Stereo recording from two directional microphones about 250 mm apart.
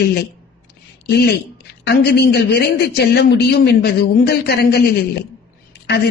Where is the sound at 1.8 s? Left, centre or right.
Left.